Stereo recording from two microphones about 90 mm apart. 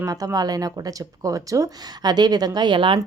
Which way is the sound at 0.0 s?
40° right (ahead or behind).